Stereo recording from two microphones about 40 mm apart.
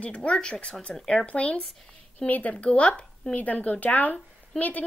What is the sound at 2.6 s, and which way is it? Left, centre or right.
A woman's voice, left.